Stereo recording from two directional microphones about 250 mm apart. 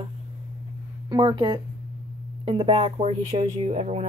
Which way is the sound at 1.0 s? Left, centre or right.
Centre.